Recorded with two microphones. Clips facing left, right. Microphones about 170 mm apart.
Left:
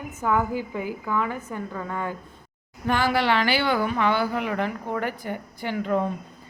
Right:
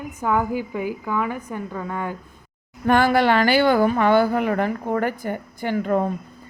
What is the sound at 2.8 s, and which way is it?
Speech, 55° right (ahead or behind).